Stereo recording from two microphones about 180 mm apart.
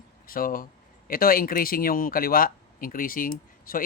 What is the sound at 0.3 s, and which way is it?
Speech, 55° left (ahead or behind).